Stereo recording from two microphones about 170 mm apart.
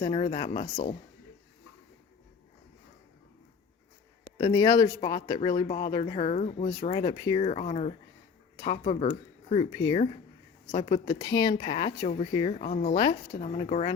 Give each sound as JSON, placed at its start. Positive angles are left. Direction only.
{"t": 0.0, "sound": "speech", "side_deg": 35}
{"t": 4.4, "sound": "speech", "side_deg": 25}
{"t": 6.8, "sound": "speech", "side_deg": 30}
{"t": 9.7, "sound": "speech", "side_deg": 30}
{"t": 12.0, "sound": "speech", "side_deg": 40}
{"t": 12.9, "sound": "speech", "side_deg": 25}
{"t": 13.4, "sound": "speech", "side_deg": 40}